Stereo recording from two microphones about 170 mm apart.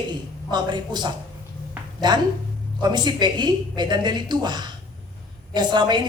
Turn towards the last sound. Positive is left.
turn(degrees=-25)  # may be behind; listen again after turning